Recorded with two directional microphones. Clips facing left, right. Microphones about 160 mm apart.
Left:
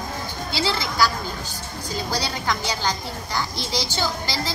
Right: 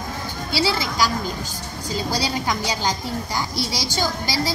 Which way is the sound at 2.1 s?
15° right (ahead or behind).